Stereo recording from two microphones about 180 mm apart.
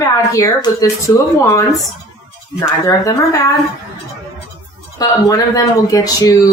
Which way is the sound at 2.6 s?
15° left (ahead or behind).